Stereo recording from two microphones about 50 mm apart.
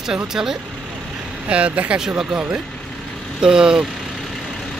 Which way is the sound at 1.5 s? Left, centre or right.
Right.